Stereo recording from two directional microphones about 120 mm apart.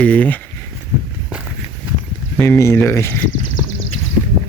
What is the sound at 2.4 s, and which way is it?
Speech, 20° left (ahead or behind).